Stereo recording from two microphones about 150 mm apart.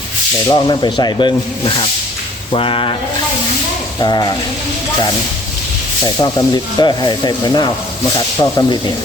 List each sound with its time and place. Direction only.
0.4 s speech: 30° left (ahead or behind)
4.0 s sanding: 30° left (ahead or behind)
6.1 s sanding: 25° left (ahead or behind)